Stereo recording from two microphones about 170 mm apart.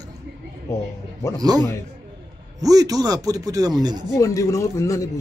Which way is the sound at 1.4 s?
20° right (ahead or behind).